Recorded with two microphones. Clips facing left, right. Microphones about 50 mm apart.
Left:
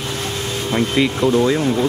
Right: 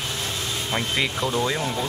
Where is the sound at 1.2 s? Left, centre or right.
Left.